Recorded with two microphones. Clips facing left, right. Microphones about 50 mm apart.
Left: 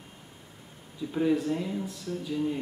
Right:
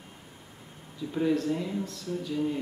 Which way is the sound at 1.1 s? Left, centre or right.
Centre.